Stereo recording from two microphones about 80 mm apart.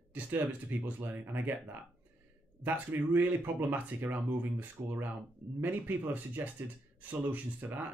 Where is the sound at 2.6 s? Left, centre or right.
Right.